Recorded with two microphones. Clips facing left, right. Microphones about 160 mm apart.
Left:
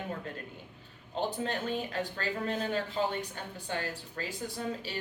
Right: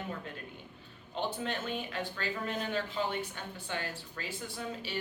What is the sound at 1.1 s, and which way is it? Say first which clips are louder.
Speech: left 2 dB; 35° left (ahead or behind).